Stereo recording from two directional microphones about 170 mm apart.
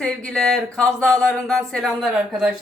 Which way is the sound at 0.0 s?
5° left (ahead or behind).